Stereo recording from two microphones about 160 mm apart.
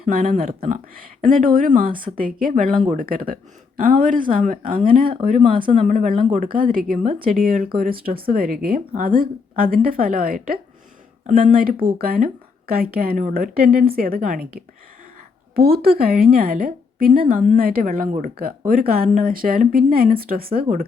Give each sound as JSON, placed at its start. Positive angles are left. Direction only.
{"t": 0.0, "sound": "speech", "side_deg": -60}
{"t": 5.4, "sound": "speech", "side_deg": -35}
{"t": 5.8, "sound": "speech", "side_deg": -50}
{"t": 6.1, "sound": "speech", "side_deg": -40}
{"t": 6.7, "sound": "a woman's voice", "side_deg": -60}
{"t": 17.6, "sound": "speech", "side_deg": -65}